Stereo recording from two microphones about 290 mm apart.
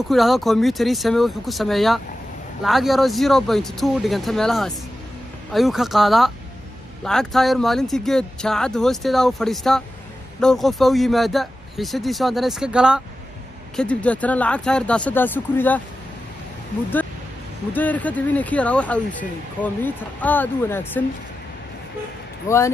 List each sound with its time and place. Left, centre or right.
0.1 s speech: centre
17.7 s speech: centre